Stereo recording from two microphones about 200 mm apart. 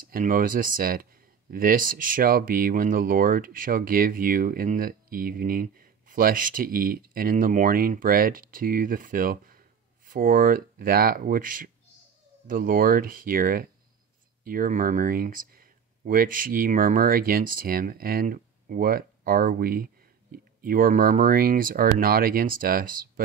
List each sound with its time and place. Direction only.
0.0 s speech: 45° right (ahead or behind)